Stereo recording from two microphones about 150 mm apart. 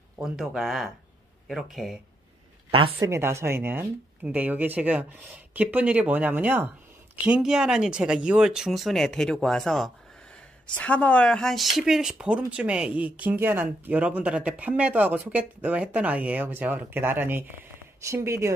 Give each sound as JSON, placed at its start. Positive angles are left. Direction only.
{"t": 0.2, "sound": "speech", "side_deg": 0}
{"t": 2.7, "sound": "a woman's voice", "side_deg": -35}
{"t": 3.1, "sound": "speech", "side_deg": -15}